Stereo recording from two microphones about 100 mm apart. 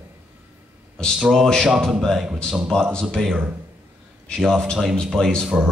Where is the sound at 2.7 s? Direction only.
5° left (ahead or behind).